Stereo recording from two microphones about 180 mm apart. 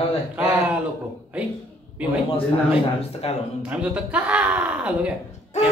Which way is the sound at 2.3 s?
30° left (ahead or behind).